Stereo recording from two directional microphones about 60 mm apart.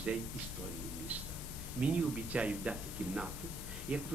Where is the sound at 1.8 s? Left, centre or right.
Right.